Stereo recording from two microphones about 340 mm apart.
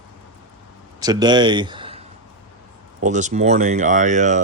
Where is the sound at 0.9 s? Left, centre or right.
Centre.